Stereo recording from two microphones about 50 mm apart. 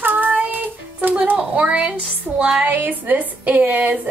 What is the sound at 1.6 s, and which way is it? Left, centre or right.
Speech, right.